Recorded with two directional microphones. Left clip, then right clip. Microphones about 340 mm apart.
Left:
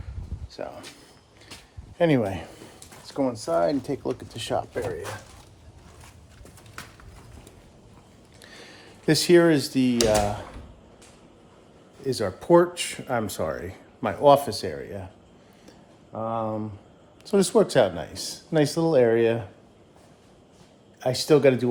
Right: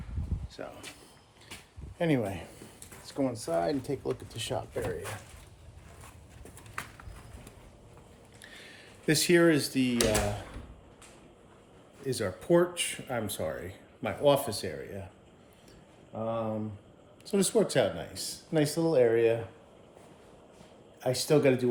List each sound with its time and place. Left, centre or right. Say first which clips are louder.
0.5 s speech: left 8 dB; centre
2.0 s speech: left 8 dB; left
8.4 s a sound: left 4 dB; centre
12.0 s speech: left 6 dB; centre
16.1 s speech: left 5 dB; left
21.0 s speech: left 6 dB; left